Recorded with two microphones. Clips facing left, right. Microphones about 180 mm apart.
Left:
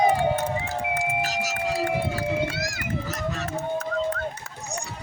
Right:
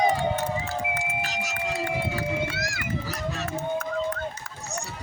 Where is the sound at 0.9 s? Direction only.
40° left (ahead or behind).